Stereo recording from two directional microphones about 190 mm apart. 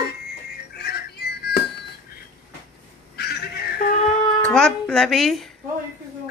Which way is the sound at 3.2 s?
55° left (ahead or behind).